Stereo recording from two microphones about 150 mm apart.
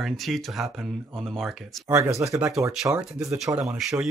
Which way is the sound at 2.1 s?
20° right (ahead or behind).